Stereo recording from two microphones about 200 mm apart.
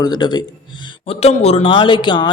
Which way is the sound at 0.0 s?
20° left (ahead or behind).